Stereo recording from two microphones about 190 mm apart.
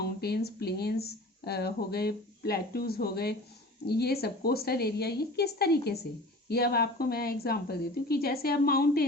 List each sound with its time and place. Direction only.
0.0 s a woman's voice: 55° left (ahead or behind)